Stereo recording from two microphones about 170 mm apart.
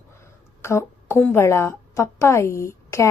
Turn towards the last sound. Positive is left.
turn(degrees=15)  # may be behind; listen again after turning